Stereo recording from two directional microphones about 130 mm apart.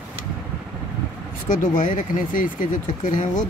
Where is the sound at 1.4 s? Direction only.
90° left.